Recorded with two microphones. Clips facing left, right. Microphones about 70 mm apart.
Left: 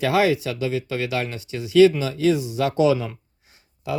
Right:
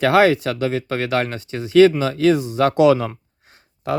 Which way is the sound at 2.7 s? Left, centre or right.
Right.